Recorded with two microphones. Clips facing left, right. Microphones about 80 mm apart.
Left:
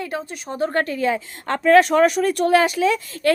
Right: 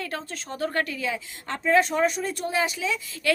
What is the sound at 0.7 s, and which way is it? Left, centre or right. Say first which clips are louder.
Speech: left 9 dB; left.